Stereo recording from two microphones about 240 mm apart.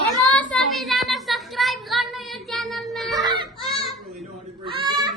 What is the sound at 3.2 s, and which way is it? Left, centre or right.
Baby cry, centre.